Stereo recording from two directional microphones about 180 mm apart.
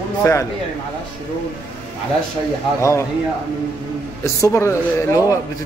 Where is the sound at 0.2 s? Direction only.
15° left (ahead or behind).